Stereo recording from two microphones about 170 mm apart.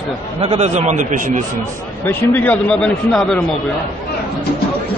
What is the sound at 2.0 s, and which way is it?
Speech, 10° left (ahead or behind).